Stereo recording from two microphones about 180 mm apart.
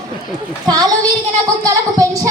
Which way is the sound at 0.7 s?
20° right (ahead or behind).